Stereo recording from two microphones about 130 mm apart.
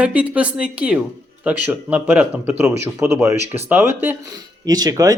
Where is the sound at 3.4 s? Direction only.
55° right (ahead or behind).